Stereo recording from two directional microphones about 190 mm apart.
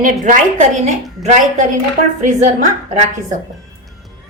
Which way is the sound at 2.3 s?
40° right (ahead or behind).